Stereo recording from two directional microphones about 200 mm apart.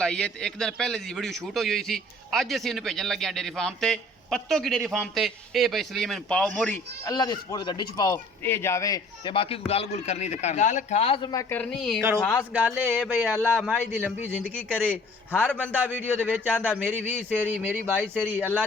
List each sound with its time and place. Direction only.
0.0 s a man's voice: 5° left (ahead or behind)
7.1 s a man's voice: 20° left (ahead or behind); by 14.3 s 10° right (ahead or behind)
14.8 s a man's voice: 5° left (ahead or behind)
15.5 s speech: 10° right (ahead or behind)